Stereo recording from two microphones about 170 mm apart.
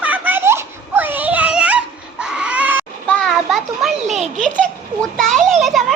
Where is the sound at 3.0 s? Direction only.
5° left (ahead or behind).